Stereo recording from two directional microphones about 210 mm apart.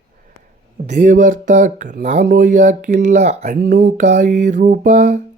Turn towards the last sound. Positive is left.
turn(degrees=-35)  # may be behind; listen again after turning